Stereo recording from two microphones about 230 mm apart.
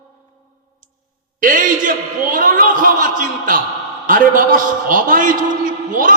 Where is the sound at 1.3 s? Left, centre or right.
Right.